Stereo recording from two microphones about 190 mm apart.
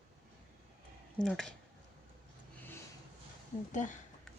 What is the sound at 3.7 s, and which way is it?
Speech, 40° left (ahead or behind).